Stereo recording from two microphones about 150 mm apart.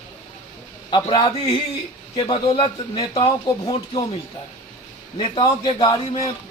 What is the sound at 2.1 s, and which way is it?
A man's voice, 35° left (ahead or behind).